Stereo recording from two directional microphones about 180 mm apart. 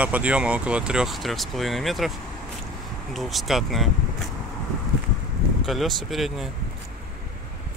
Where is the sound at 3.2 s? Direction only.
Centre (ahead or behind).